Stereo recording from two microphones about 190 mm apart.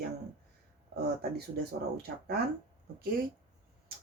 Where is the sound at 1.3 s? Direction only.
55° right (ahead or behind).